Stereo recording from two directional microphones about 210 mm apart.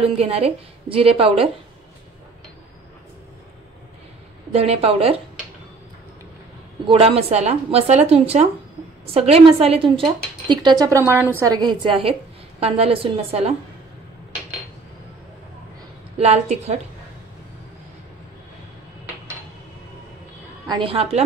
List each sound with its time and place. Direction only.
0.2 s a woman's voice: 30° right (ahead or behind)
4.5 s a woman's voice: 30° right (ahead or behind)
6.9 s a woman's voice: 25° right (ahead or behind)
16.2 s a woman's voice: 30° right (ahead or behind)
20.6 s a woman's voice: 25° right (ahead or behind)